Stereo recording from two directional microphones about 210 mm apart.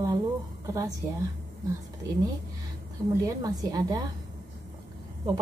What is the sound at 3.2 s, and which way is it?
Speech, 15° right (ahead or behind).